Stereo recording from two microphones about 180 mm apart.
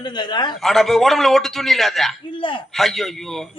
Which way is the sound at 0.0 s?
25° left (ahead or behind).